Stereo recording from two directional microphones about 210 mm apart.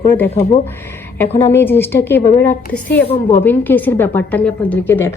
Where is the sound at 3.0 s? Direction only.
30° left (ahead or behind).